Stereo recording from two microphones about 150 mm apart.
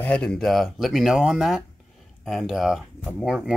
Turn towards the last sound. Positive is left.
turn(degrees=-5)  # may be behind; listen again after turning